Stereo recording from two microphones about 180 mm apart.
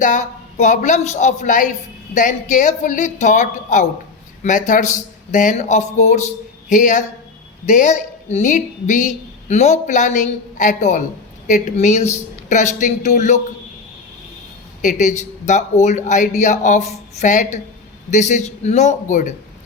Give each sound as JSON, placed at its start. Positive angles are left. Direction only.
{"t": 0.0, "sound": "a woman's voice", "side_deg": 45}
{"t": 14.8, "sound": "a man's voice", "side_deg": 45}